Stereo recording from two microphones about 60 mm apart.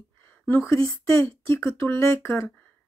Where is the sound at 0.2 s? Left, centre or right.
Left.